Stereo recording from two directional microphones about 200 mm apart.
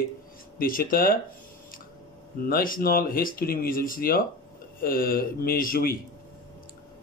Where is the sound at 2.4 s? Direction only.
50° left (ahead or behind).